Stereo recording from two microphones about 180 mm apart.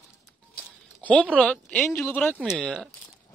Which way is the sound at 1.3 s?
5° left (ahead or behind).